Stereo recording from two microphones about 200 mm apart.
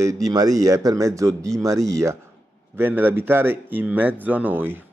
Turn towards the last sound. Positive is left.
turn(degrees=-10)  # may be behind; listen again after turning